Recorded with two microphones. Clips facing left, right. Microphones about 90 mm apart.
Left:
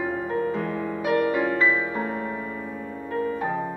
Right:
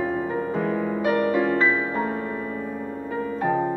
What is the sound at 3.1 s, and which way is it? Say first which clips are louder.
Music: right 2 dB; 5° right (ahead or behind).